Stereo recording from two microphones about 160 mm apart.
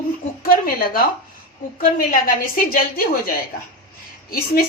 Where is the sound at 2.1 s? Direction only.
60° left (ahead or behind).